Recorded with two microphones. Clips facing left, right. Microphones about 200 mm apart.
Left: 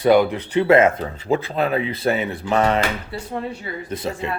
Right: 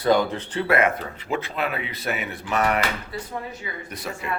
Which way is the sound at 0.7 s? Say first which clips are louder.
Left 6 dB; 25° left (ahead or behind).